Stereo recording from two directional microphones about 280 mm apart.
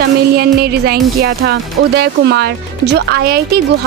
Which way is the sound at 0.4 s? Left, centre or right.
Right.